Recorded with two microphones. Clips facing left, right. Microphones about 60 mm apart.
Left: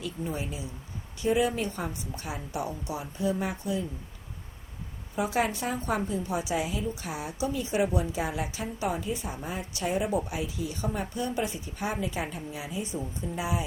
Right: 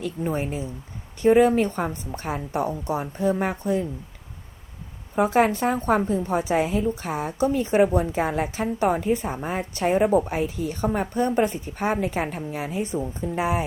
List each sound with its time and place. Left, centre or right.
0.0 s a woman's voice: right
5.1 s a woman's voice: right